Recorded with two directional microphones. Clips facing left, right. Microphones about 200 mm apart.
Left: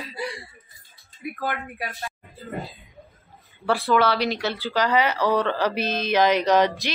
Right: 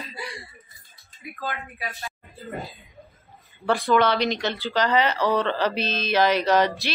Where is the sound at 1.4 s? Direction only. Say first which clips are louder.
Left 2 dB; 55° left (ahead or behind).